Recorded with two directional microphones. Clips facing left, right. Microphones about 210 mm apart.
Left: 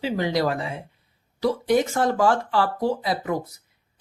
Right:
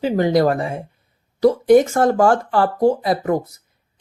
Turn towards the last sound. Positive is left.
turn(degrees=-50)  # may be behind; listen again after turning